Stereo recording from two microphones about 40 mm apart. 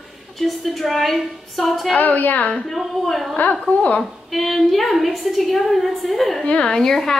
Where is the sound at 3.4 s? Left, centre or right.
Left.